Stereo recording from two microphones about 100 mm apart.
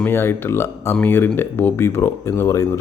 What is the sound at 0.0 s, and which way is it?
A man's voice, 25° left (ahead or behind).